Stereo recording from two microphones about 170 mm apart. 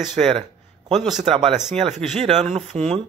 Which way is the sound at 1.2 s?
35° right (ahead or behind).